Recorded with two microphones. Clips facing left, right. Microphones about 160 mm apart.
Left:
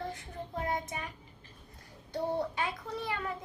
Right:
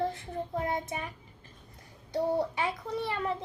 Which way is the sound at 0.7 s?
25° right (ahead or behind).